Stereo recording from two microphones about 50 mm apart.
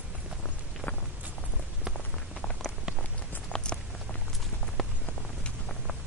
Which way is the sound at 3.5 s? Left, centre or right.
Centre.